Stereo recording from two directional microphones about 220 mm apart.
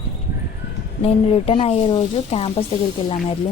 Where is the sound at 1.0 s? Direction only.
25° left (ahead or behind).